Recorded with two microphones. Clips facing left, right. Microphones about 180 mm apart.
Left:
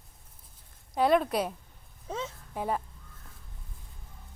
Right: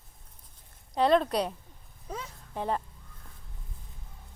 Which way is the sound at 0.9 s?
5° left (ahead or behind).